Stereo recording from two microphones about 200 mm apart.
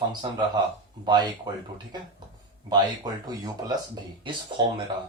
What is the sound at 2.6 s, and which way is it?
Speech, 20° right (ahead or behind).